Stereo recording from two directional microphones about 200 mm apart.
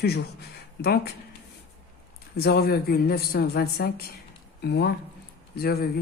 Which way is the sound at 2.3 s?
50° left (ahead or behind).